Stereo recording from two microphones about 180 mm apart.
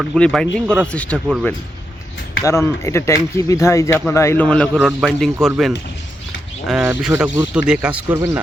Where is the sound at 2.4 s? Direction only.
15° left (ahead or behind); by 8.2 s 10° right (ahead or behind).